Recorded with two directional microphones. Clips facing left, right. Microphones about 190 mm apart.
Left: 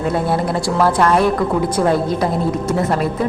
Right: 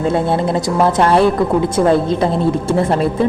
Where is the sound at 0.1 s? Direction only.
25° right (ahead or behind).